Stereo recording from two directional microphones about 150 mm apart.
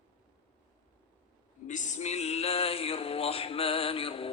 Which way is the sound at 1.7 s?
55° left (ahead or behind).